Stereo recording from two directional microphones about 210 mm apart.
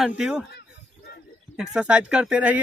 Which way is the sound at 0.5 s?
50° left (ahead or behind).